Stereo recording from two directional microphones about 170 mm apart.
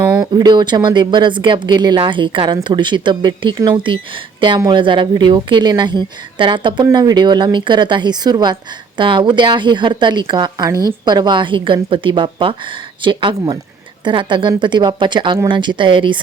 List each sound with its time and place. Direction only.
0.0 s speech: 20° right (ahead or behind)